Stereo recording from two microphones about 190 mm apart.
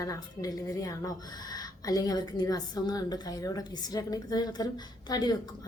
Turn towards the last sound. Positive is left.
turn(degrees=20)  # may be behind; listen again after turning